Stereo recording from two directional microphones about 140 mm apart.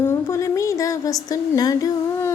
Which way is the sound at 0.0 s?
20° left (ahead or behind).